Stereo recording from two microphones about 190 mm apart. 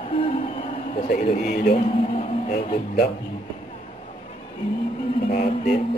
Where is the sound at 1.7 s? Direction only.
30° left (ahead or behind).